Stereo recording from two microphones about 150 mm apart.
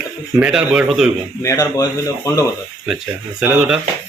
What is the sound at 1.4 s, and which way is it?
Speech, 20° left (ahead or behind).